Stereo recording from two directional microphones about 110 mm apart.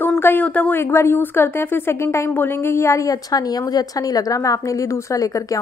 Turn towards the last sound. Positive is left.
turn(degrees=30)  # may be behind; listen again after turning